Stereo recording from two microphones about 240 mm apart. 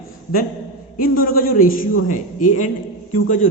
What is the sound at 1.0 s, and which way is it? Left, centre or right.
A man's voice, left.